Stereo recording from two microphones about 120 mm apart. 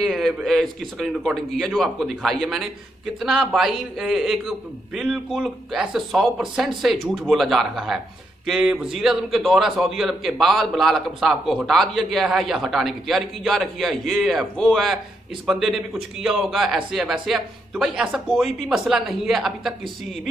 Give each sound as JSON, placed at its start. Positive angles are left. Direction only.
{"t": 0.0, "sound": "a man's voice", "side_deg": 0}